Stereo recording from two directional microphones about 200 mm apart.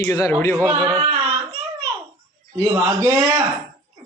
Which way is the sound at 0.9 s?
30° right (ahead or behind).